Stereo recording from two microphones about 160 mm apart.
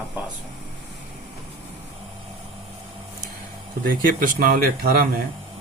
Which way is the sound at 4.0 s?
60° right (ahead or behind).